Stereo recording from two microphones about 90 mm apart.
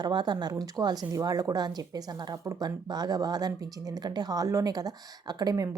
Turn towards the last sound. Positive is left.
turn(degrees=-40)  # may be behind; listen again after turning